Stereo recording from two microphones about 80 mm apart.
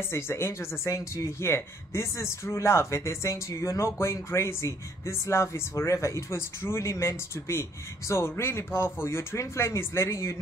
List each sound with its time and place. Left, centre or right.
0.1 s speech: left